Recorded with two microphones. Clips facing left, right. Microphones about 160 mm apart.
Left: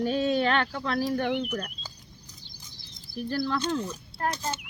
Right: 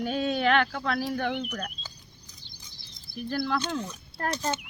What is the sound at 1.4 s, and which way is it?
Speech, 25° left (ahead or behind).